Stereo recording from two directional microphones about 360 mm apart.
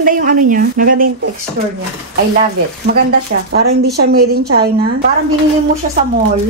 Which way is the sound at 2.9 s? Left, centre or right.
Right.